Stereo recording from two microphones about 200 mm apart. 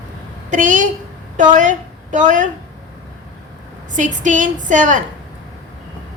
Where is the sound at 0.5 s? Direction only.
40° right (ahead or behind).